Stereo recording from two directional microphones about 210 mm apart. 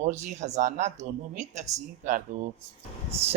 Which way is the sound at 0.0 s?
35° right (ahead or behind).